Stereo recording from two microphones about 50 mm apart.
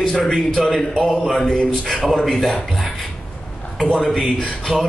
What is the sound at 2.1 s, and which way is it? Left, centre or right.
Speech, centre.